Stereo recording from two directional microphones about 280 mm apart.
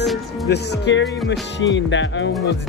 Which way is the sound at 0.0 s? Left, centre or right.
Centre.